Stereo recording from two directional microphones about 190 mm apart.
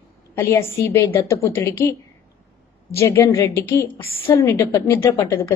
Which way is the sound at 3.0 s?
15° left (ahead or behind).